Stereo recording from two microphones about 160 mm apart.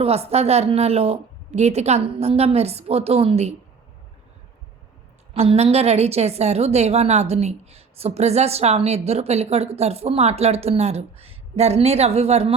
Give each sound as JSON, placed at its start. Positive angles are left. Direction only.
{"t": 0.0, "sound": "a woman's voice", "side_deg": -40}
{"t": 5.3, "sound": "a woman's voice", "side_deg": -40}